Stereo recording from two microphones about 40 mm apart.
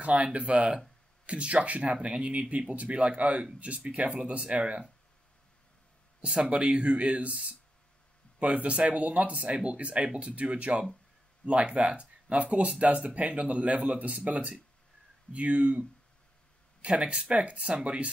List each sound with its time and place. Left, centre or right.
0.0 s speech: right
6.2 s speech: right